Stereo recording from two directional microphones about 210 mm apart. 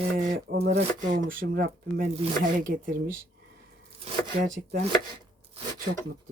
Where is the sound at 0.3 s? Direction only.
45° right (ahead or behind).